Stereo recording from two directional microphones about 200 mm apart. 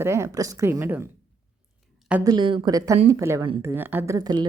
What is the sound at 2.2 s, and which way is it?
Speech, 20° right (ahead or behind).